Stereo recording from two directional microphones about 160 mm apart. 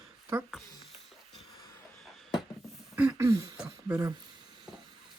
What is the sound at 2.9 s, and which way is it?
Speech, 15° right (ahead or behind).